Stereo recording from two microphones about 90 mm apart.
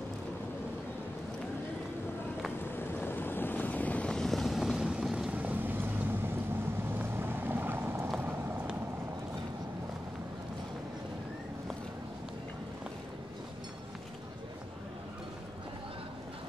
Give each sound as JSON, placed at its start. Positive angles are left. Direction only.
{"t": 2.7, "sound": "vehicle", "side_deg": 20}
{"t": 6.9, "sound": "boat", "side_deg": -25}
{"t": 8.2, "sound": "vehicle", "side_deg": -20}